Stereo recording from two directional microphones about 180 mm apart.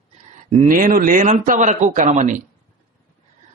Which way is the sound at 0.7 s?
50° right (ahead or behind).